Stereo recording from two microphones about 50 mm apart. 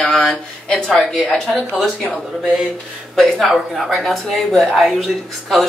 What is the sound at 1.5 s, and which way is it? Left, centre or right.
Speech, centre.